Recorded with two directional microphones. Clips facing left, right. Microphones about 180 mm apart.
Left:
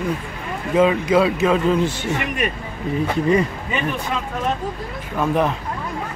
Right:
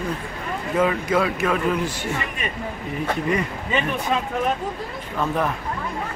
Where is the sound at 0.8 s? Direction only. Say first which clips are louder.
Left 5 dB; 20° left (ahead or behind).